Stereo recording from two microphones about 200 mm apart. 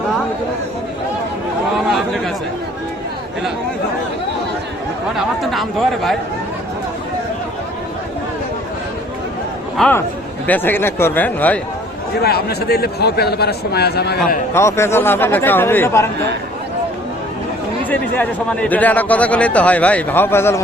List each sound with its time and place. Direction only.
1.9 s chatter: centre (ahead or behind)
5.1 s speech: centre (ahead or behind)
9.7 s a man's voice: 5° left (ahead or behind)
12.2 s a man's voice: 50° left (ahead or behind)
14.5 s a man's voice: 15° left (ahead or behind)
17.8 s a man's voice: 5° left (ahead or behind)